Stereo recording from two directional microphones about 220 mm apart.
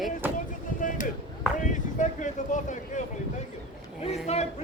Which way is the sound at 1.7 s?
35° left (ahead or behind).